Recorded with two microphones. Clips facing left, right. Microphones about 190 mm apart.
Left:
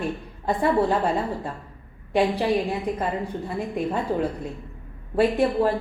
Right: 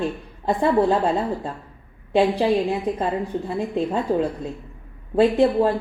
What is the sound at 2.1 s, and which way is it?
Speech, 25° right (ahead or behind).